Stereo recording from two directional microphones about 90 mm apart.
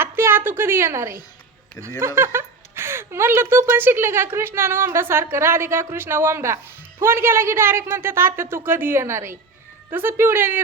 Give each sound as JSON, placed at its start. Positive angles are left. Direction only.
{"t": 0.0, "sound": "a woman's voice", "side_deg": -25}